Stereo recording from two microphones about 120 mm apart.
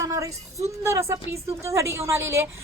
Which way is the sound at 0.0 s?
25° right (ahead or behind).